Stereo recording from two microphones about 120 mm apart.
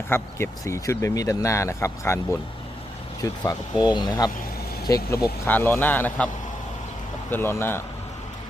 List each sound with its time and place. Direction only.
0.1 s speech: 20° left (ahead or behind)
3.4 s speech: 35° left (ahead or behind)
5.5 s a man's voice: 15° left (ahead or behind)